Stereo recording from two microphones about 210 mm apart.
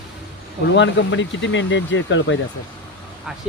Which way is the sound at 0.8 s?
60° left (ahead or behind).